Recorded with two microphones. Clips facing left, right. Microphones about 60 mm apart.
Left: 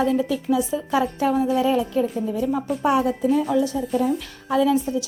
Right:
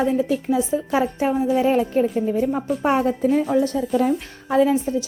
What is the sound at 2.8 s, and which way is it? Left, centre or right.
Speech, right.